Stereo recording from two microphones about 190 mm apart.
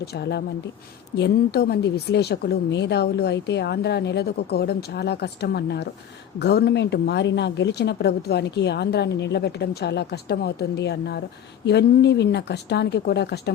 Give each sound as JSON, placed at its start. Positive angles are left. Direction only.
{"t": 0.0, "sound": "a woman's voice", "side_deg": 60}